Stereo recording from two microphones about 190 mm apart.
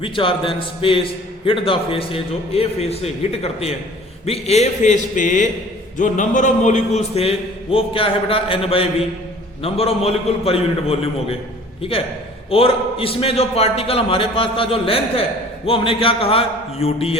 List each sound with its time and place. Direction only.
0.0 s a man's voice: 25° left (ahead or behind)